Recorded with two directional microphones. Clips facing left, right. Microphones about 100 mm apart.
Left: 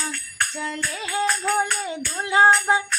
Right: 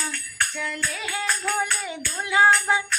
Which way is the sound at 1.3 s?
25° left (ahead or behind).